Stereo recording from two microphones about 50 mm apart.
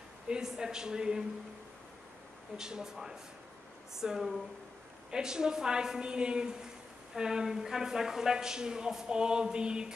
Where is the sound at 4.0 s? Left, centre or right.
Centre.